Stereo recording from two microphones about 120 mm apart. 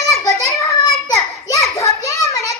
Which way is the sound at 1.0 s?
25° left (ahead or behind).